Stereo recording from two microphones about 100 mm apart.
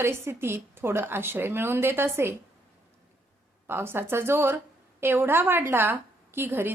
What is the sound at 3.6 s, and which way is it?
A woman's voice, 25° right (ahead or behind).